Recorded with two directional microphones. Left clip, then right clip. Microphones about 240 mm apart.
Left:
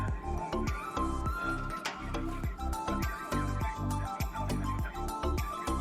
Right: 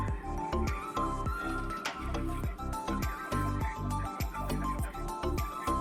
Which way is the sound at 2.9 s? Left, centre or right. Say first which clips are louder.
Even; centre.